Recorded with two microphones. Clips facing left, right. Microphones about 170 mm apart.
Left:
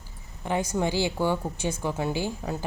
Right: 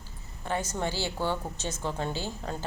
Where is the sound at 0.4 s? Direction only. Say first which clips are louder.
Left 5 dB; 15° left (ahead or behind).